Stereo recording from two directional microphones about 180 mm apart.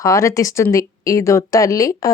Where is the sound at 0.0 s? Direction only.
15° left (ahead or behind).